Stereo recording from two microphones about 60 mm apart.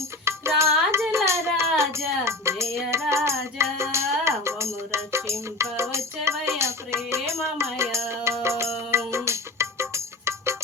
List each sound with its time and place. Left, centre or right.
0.3 s music: right